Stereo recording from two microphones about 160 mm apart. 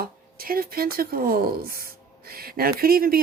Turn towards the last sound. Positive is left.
turn(degrees=-65)  # may be behind; listen again after turning